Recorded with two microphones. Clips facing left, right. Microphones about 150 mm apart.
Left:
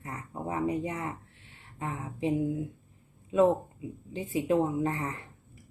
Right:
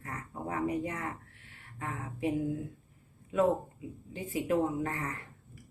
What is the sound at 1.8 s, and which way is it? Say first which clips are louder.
Speech: left 2 dB; 20° left (ahead or behind).